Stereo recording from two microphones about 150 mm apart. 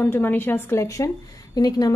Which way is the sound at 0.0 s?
15° left (ahead or behind).